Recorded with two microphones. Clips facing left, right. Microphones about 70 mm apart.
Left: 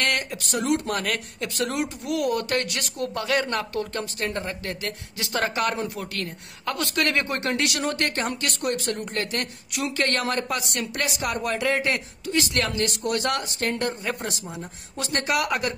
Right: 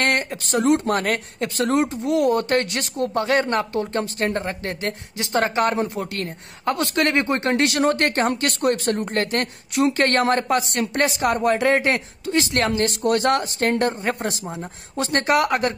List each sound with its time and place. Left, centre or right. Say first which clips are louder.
0.0 s a woman's voice: right 4 dB; right